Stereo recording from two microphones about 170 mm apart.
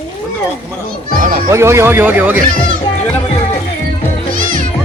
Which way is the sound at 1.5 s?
15° right (ahead or behind).